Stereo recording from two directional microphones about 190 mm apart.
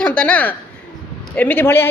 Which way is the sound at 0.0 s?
10° left (ahead or behind).